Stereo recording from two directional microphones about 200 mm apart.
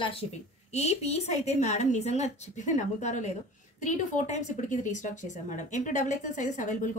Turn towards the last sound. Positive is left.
turn(degrees=40)  # may be behind; listen again after turning